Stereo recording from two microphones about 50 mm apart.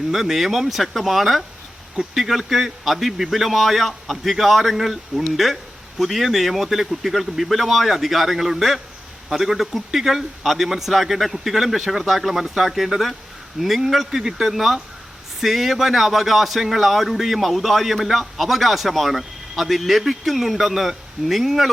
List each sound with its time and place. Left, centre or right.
0.1 s speech: centre